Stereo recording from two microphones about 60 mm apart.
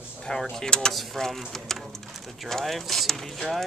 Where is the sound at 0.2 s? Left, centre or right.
Centre.